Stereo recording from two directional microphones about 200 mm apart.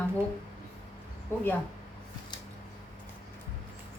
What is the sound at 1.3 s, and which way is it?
Speech, 10° left (ahead or behind).